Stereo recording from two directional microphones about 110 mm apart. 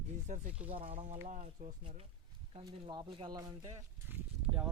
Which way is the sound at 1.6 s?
90° right.